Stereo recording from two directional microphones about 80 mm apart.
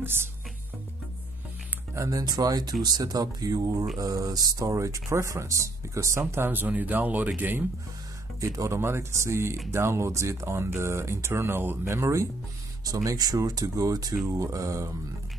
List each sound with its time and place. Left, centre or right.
0.0 s speech: right
2.0 s speech: right
8.4 s speech: right